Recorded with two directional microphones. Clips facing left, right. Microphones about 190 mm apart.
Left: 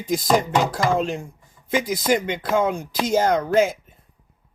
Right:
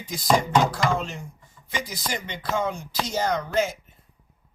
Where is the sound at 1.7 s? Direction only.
50° left (ahead or behind).